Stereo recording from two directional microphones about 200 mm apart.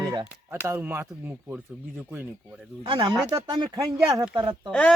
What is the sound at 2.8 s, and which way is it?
Speech, 25° right (ahead or behind).